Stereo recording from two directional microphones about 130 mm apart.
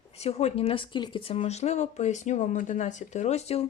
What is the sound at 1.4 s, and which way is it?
Speech, 55° left (ahead or behind).